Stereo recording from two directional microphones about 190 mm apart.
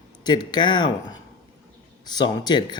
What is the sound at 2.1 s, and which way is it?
Speech, 20° left (ahead or behind).